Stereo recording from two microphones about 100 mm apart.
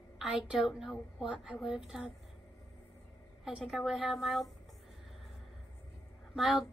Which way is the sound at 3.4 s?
5° right (ahead or behind).